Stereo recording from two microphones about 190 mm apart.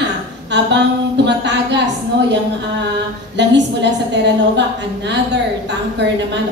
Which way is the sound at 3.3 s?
65° right (ahead or behind).